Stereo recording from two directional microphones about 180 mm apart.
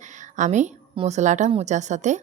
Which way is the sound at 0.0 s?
40° right (ahead or behind).